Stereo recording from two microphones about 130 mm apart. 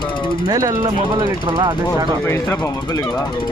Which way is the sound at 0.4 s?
30° right (ahead or behind).